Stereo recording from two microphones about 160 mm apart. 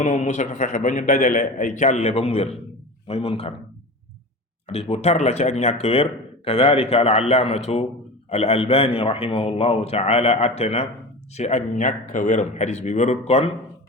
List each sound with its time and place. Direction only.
0.0 s a man's voice: 45° left (ahead or behind)
4.7 s a man's voice: 40° left (ahead or behind)